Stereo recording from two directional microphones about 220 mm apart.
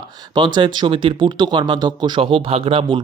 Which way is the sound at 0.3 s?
20° right (ahead or behind).